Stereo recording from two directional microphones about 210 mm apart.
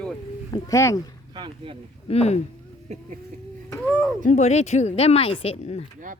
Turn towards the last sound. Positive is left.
turn(degrees=30)  # may be behind; listen again after turning